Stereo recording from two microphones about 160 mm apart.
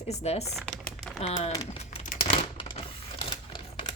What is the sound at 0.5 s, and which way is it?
Typing, 5° left (ahead or behind).